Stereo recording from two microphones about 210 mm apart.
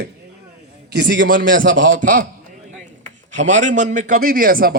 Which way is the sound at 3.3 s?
35° right (ahead or behind).